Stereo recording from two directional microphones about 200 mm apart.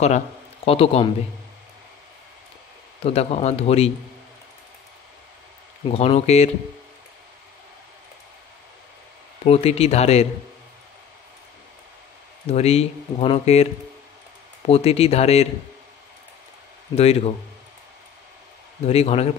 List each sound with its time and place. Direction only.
0.7 s a man's voice: 30° left (ahead or behind)
3.0 s speech: 30° left (ahead or behind)
5.9 s speech: 30° left (ahead or behind)
9.4 s speech: 30° left (ahead or behind)
12.4 s speech: 30° left (ahead or behind)
14.7 s speech: 30° left (ahead or behind)
16.9 s speech: 30° left (ahead or behind)
18.9 s speech: 30° left (ahead or behind)